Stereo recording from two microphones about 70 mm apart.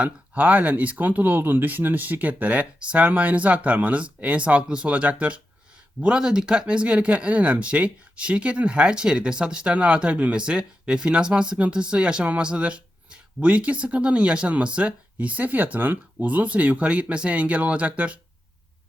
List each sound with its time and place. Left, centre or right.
0.0 s speech: right